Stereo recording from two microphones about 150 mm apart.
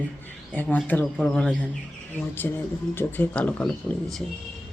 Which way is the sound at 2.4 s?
15° left (ahead or behind).